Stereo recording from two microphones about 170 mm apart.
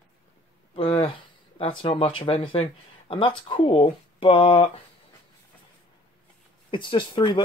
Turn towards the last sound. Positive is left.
turn(degrees=30)  # may be behind; listen again after turning